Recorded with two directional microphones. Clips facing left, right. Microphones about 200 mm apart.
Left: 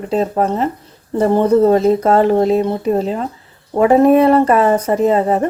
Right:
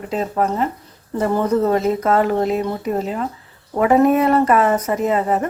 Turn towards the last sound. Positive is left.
turn(degrees=30)  # may be behind; listen again after turning